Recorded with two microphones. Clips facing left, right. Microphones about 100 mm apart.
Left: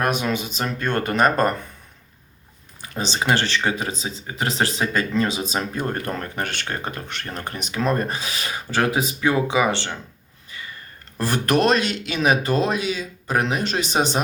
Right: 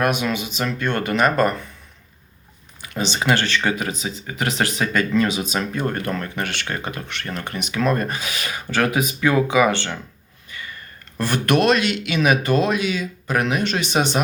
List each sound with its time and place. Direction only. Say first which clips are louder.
0.0 s speech: right 1 dB; 40° left (ahead or behind)
2.8 s speech: right 2 dB; 35° left (ahead or behind)
10.5 s sniff: right 2 dB; 30° left (ahead or behind)
11.2 s speech: right 1 dB; 35° left (ahead or behind)